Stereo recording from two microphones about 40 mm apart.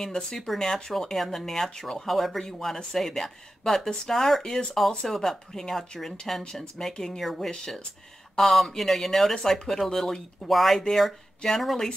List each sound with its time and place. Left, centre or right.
0.0 s speech: centre
4.4 s speech: left
4.7 s speech: centre
7.5 s speech: centre
8.4 s speech: centre